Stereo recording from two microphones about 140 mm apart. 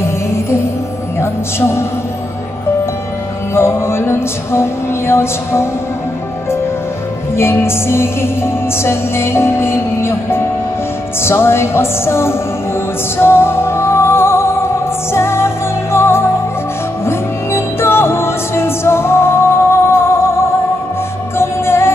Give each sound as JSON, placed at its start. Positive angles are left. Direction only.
{"t": 1.2, "sound": "speech", "side_deg": 20}
{"t": 3.5, "sound": "music", "side_deg": 20}
{"t": 7.3, "sound": "music", "side_deg": 20}
{"t": 21.4, "sound": "music", "side_deg": 20}